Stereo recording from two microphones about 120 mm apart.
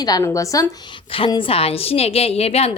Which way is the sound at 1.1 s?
45° left (ahead or behind).